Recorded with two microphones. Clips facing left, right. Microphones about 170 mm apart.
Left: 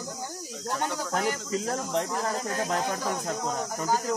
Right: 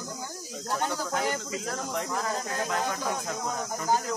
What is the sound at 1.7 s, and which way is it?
Speech, 25° left (ahead or behind).